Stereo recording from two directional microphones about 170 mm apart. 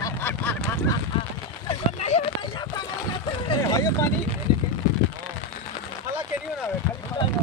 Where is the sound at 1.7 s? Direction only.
40° left (ahead or behind).